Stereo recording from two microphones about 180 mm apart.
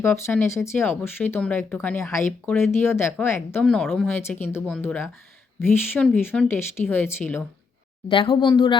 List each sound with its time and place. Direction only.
0.0 s speech: 10° left (ahead or behind)
8.0 s speech: 30° left (ahead or behind)